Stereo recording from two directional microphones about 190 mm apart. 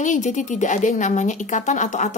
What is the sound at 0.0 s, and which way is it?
Speech, 40° left (ahead or behind).